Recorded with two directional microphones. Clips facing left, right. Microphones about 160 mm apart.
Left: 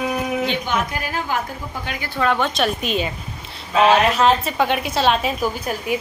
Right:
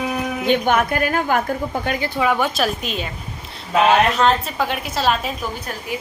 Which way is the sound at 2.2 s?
5° right (ahead or behind).